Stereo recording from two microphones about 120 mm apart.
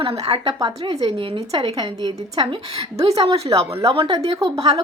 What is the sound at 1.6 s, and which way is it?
Speech, 35° right (ahead or behind).